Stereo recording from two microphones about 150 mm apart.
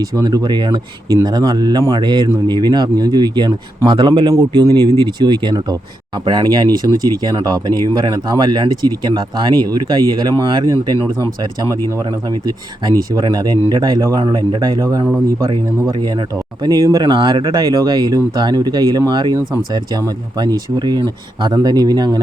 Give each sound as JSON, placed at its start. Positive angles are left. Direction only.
{"t": 0.2, "sound": "speech", "side_deg": -25}
{"t": 12.5, "sound": "speech", "side_deg": -25}
{"t": 16.6, "sound": "speech", "side_deg": -25}